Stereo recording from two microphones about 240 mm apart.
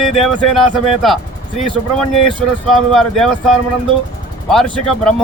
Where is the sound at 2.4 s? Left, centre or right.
Centre.